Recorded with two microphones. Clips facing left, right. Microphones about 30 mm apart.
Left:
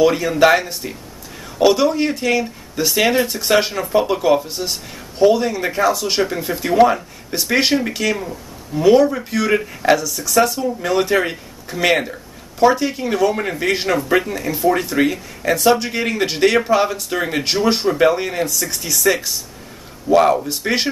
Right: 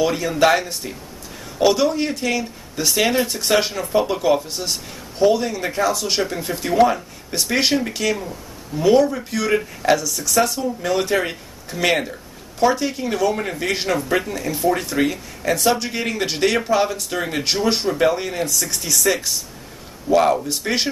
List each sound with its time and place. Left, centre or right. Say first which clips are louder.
0.0 s speech: left 4 dB; centre